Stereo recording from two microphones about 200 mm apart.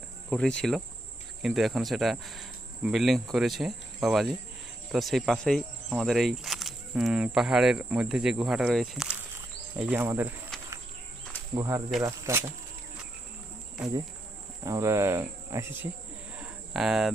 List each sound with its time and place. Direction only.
0.3 s speech: 5° left (ahead or behind)
1.4 s cricket: centre (ahead or behind)
4.9 s speech: centre (ahead or behind)
11.5 s speech: 15° right (ahead or behind)
14.6 s cricket: 15° right (ahead or behind)
16.4 s cricket: centre (ahead or behind)